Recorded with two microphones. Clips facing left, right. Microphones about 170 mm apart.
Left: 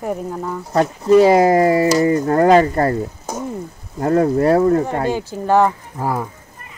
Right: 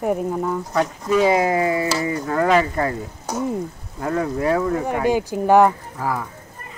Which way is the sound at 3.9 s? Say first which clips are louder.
Left 7 dB; 40° left (ahead or behind).